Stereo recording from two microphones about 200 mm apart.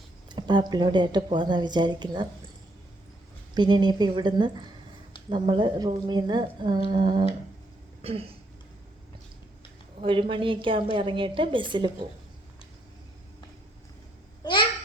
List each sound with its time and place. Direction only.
0.3 s speech: 20° right (ahead or behind)
3.5 s speech: 20° right (ahead or behind)
10.0 s speech: 25° right (ahead or behind)